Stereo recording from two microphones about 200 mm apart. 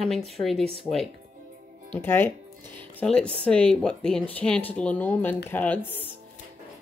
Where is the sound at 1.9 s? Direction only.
10° left (ahead or behind).